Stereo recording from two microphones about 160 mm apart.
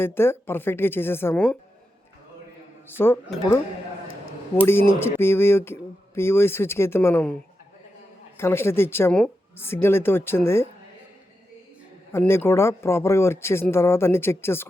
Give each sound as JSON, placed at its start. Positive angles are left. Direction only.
{"t": 0.0, "sound": "speech", "side_deg": 15}
{"t": 2.8, "sound": "speech", "side_deg": 15}
{"t": 4.6, "sound": "speech", "side_deg": 15}
{"t": 8.4, "sound": "speech", "side_deg": 15}
{"t": 12.1, "sound": "speech", "side_deg": 15}